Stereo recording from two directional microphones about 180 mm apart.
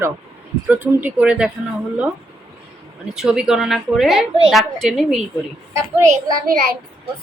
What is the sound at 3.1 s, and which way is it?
A woman's voice, 5° right (ahead or behind).